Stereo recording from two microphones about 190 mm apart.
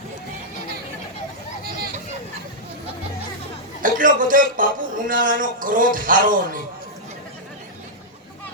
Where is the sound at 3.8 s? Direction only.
45° right (ahead or behind).